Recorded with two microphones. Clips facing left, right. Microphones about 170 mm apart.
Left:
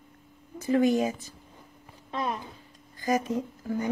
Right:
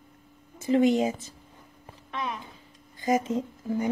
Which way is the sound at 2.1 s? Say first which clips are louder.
Left 3 dB; 35° left (ahead or behind).